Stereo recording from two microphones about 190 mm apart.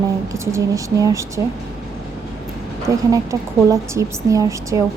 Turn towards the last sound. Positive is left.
turn(degrees=-15)  # may be behind; listen again after turning